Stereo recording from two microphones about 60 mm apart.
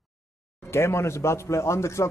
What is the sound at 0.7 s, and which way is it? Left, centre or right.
Speech, left.